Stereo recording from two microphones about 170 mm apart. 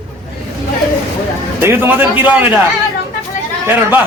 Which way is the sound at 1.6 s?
10° right (ahead or behind).